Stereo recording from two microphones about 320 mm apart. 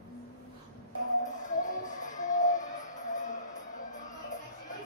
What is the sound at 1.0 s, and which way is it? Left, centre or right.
Music, left.